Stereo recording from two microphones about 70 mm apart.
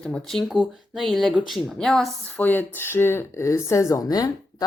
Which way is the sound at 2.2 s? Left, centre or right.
Left.